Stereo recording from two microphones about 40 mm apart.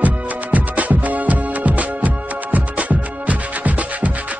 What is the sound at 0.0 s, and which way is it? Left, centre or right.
Music, right.